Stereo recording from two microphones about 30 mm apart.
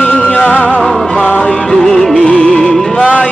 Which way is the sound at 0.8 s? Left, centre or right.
Centre.